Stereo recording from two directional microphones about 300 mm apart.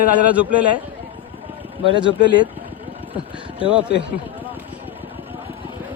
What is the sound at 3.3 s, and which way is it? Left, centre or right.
Speech, centre.